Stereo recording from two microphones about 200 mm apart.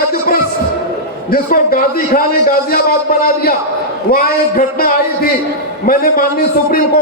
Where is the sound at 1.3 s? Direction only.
45° left (ahead or behind).